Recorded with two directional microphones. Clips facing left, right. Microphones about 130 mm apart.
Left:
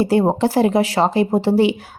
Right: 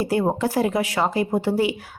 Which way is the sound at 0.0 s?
30° left (ahead or behind).